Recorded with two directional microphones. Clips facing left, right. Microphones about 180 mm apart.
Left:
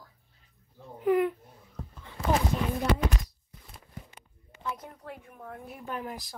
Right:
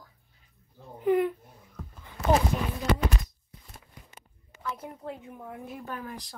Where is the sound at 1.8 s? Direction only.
35° left (ahead or behind).